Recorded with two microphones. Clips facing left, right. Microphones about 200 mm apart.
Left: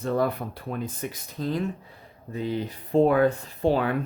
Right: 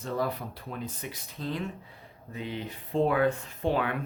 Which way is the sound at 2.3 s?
35° left (ahead or behind).